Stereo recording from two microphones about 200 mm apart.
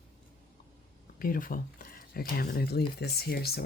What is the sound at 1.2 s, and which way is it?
Speech, 45° left (ahead or behind).